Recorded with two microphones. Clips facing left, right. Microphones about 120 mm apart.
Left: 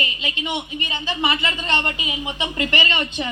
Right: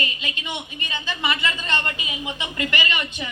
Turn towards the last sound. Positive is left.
turn(degrees=30)  # may be behind; listen again after turning